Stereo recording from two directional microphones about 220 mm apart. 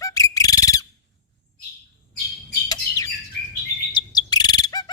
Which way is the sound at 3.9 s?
20° left (ahead or behind).